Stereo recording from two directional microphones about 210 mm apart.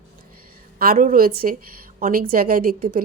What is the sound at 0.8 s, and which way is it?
Speech, 45° right (ahead or behind).